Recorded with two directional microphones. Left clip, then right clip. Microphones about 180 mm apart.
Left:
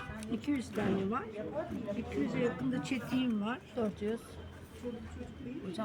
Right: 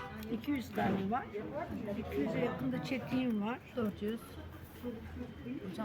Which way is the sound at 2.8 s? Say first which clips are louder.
Right 1 dB; 10° right (ahead or behind).